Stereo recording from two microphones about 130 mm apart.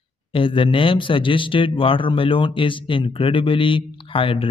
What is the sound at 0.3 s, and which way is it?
Speech, 40° left (ahead or behind).